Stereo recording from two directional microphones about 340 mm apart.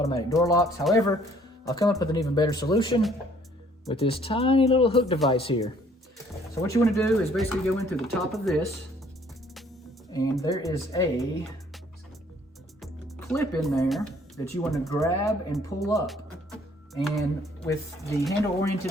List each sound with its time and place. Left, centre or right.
0.0 s speech: centre
10.4 s speech: centre
13.3 s speech: centre